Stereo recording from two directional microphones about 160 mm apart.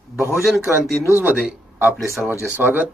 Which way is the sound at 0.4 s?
Centre (ahead or behind).